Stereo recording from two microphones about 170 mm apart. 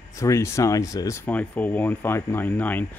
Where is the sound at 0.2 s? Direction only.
20° left (ahead or behind).